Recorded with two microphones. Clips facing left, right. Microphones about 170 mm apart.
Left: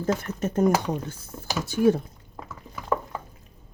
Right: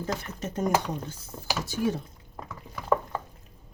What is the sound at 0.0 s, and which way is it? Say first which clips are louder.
Speech: left 6 dB; 50° left (ahead or behind).